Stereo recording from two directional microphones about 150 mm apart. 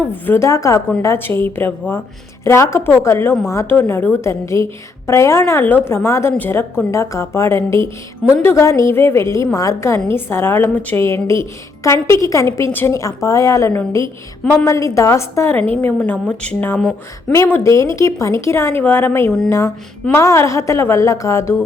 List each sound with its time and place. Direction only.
0.1 s a woman's voice: 15° left (ahead or behind)